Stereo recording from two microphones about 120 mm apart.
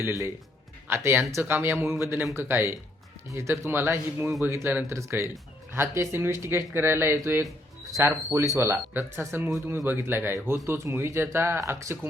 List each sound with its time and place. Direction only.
0.9 s speech: 20° right (ahead or behind)